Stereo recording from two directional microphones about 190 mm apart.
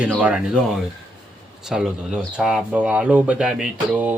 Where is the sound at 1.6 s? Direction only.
5° right (ahead or behind).